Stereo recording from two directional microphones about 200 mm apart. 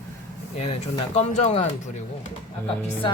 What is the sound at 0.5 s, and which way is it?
Speech, 30° left (ahead or behind).